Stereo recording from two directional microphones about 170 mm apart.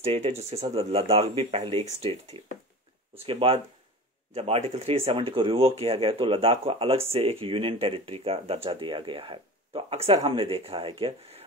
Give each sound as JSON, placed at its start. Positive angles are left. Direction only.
{"t": 0.0, "sound": "speech", "side_deg": -35}
{"t": 3.2, "sound": "speech", "side_deg": -35}